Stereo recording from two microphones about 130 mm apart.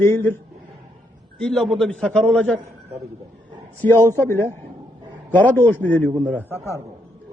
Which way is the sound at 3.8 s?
15° left (ahead or behind).